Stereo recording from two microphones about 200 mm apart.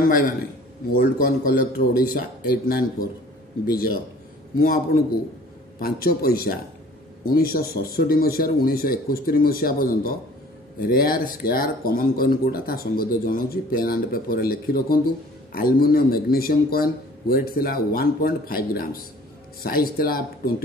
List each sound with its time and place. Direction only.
0.9 s speech: 45° left (ahead or behind)
5.8 s speech: 50° left (ahead or behind)